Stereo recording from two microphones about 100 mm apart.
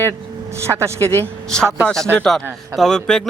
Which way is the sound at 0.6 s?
30° right (ahead or behind).